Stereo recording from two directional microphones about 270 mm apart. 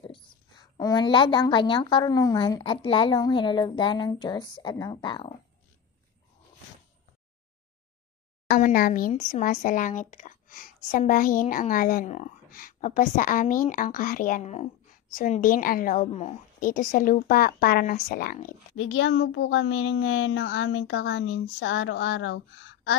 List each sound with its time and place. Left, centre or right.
0.1 s a woman's voice: centre
8.5 s speech: left
18.8 s a child's voice: left